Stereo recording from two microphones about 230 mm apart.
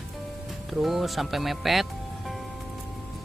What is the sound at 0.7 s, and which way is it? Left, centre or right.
Speech, centre.